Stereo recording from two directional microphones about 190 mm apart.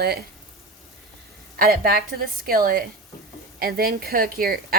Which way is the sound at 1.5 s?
50° right (ahead or behind).